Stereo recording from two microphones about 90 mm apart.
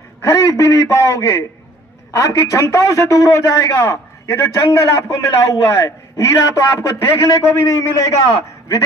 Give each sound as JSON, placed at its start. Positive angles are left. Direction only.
{"t": 0.2, "sound": "a man's voice", "side_deg": 35}